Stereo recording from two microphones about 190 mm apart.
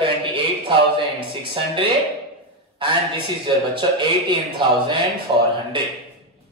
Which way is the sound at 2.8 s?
25° right (ahead or behind).